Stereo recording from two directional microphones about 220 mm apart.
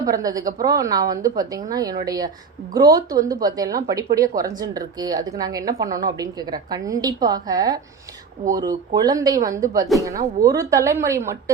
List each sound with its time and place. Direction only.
0.0 s a woman's voice: 15° right (ahead or behind)